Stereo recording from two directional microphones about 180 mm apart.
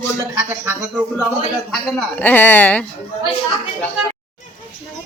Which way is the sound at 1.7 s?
Centre (ahead or behind).